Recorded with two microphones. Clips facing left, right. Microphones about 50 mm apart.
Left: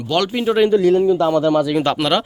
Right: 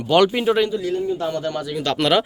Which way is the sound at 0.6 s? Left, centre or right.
Left.